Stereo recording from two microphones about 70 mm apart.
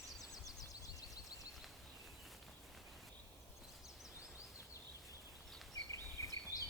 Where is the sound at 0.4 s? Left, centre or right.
Left.